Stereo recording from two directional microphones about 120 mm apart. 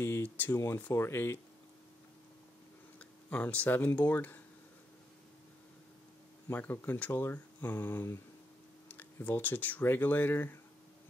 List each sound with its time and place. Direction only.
0.0 s speech: 20° left (ahead or behind)
3.3 s speech: 15° left (ahead or behind)
6.5 s speech: 15° left (ahead or behind)